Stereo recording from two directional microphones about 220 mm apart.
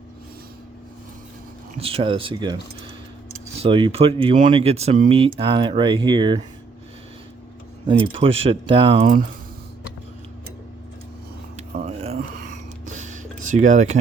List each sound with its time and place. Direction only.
1.8 s speech: 25° right (ahead or behind)
3.6 s speech: 25° right (ahead or behind)
7.9 s speech: 25° right (ahead or behind)
11.5 s a sound: 30° right (ahead or behind)